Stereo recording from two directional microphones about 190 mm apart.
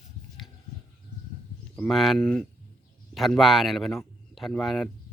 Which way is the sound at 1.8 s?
Centre (ahead or behind).